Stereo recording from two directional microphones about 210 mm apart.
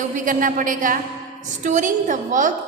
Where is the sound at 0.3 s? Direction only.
40° right (ahead or behind).